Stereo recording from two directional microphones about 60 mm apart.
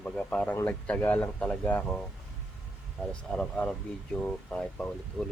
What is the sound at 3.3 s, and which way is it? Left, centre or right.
Speech, centre.